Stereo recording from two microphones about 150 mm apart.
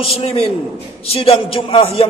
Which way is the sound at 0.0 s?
40° left (ahead or behind).